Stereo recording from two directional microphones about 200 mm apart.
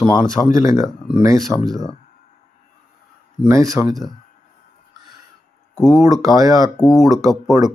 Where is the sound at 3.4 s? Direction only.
15° right (ahead or behind).